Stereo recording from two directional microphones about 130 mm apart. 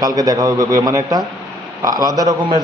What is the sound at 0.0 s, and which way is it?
A man's voice, 30° right (ahead or behind).